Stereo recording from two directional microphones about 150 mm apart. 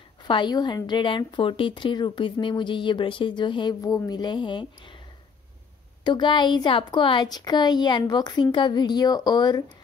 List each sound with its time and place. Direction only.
0.2 s a woman's voice: 30° left (ahead or behind)
6.0 s a woman's voice: 30° left (ahead or behind)